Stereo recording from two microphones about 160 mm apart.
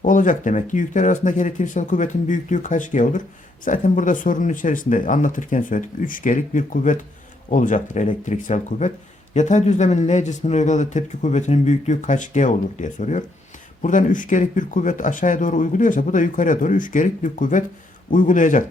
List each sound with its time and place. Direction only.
0.0 s speech: 55° left (ahead or behind)